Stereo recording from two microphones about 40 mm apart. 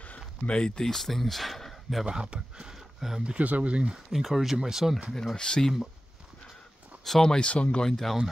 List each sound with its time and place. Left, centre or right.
0.5 s speech: left
0.8 s speech: centre
2.0 s speech: right
2.7 s a sound: centre
3.3 s speech: right
4.1 s speech: centre
5.1 s speech: centre
7.1 s speech: centre
7.3 s speech: left
7.8 s speech: centre